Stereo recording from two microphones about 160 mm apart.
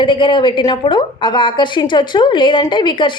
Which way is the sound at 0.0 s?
30° left (ahead or behind).